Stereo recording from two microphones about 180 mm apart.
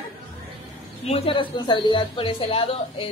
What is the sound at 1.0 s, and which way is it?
A woman's voice, 30° left (ahead or behind).